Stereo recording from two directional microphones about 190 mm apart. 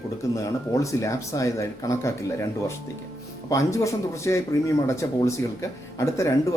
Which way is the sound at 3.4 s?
15° left (ahead or behind).